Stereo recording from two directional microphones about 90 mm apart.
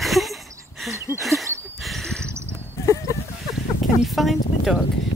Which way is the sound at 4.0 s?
Centre (ahead or behind).